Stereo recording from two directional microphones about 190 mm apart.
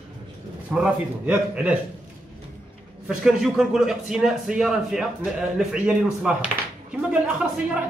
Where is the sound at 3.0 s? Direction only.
Centre (ahead or behind).